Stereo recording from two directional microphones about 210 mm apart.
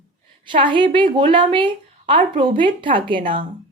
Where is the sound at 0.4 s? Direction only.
25° right (ahead or behind).